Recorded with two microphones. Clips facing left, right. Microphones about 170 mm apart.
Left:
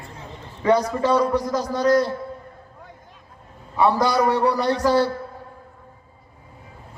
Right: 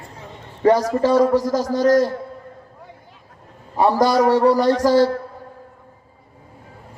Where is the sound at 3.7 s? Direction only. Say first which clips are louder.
Right 3 dB; 40° right (ahead or behind).